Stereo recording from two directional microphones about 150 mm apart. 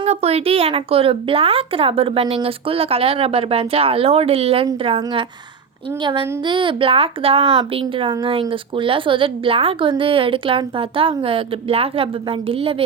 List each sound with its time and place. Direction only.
0.0 s a woman's voice: 45° right (ahead or behind)